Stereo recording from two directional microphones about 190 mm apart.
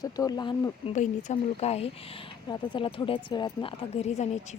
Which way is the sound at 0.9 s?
35° left (ahead or behind).